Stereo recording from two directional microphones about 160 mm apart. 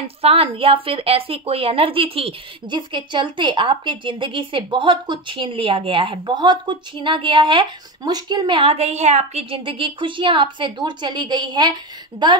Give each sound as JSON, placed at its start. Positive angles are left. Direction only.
{"t": 0.2, "sound": "a woman's voice", "side_deg": -35}